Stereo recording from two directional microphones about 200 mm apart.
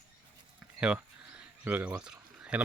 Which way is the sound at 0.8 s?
5° right (ahead or behind).